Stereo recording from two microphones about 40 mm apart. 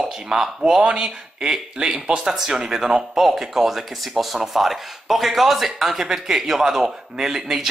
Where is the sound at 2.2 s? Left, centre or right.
Centre.